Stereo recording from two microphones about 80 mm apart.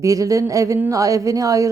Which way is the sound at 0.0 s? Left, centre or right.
Right.